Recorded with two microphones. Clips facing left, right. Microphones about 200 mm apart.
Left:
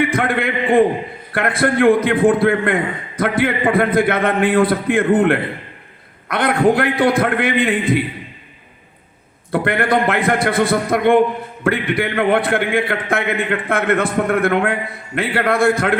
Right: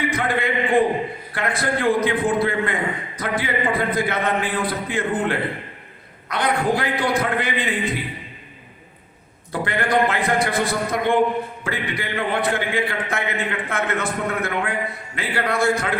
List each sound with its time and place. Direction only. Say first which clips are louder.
0.0 s a man's voice: left 4 dB; 55° left (ahead or behind)
9.5 s a man's voice: left 5 dB; 55° left (ahead or behind)